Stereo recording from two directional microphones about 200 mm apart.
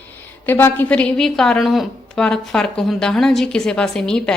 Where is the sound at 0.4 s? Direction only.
10° left (ahead or behind).